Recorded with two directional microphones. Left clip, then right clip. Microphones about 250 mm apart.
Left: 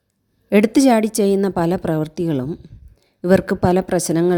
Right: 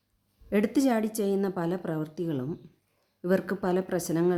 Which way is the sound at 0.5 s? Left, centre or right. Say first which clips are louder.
Left 12 dB; left.